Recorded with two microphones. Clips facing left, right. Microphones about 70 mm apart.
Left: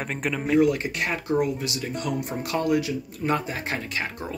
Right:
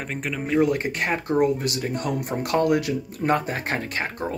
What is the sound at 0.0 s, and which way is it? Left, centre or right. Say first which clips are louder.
Speech: left 1 dB; centre.